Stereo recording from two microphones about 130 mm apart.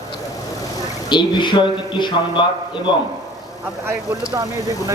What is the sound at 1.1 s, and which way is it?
Speech, 35° left (ahead or behind).